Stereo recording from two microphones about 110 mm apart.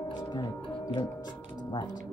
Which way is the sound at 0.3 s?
40° left (ahead or behind).